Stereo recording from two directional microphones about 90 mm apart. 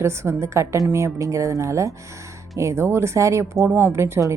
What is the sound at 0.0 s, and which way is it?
A woman's voice, 30° right (ahead or behind).